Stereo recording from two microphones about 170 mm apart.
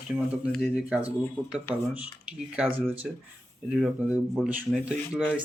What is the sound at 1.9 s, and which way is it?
Speech, 5° right (ahead or behind).